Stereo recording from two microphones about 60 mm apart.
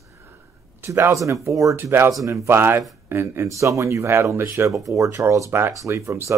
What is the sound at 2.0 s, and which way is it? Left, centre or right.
Speech, right.